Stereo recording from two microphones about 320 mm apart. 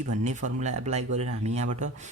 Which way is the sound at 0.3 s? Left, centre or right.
Right.